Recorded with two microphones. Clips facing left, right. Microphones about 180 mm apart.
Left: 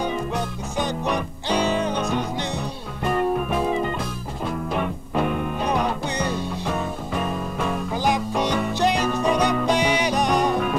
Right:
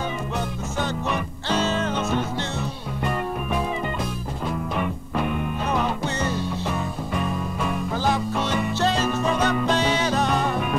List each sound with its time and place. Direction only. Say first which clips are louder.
0.7 s music: left 3 dB; 15° left (ahead or behind)
5.7 s music: even; 15° left (ahead or behind)
7.9 s music: left 1 dB; 15° left (ahead or behind)